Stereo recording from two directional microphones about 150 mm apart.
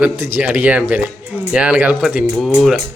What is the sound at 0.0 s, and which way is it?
Speech, 15° right (ahead or behind).